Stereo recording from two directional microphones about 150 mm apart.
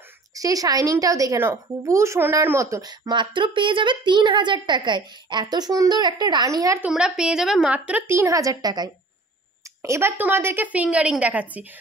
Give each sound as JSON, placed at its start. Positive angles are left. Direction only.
{"t": 0.3, "sound": "a woman's voice", "side_deg": -25}
{"t": 6.8, "sound": "a woman's voice", "side_deg": -5}